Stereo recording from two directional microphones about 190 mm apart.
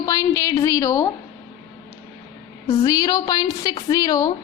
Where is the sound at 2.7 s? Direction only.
20° left (ahead or behind).